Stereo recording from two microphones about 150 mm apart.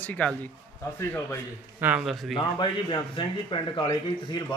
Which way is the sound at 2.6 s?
35° left (ahead or behind).